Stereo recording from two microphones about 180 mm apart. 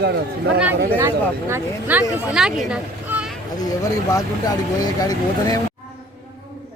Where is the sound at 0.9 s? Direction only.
15° right (ahead or behind).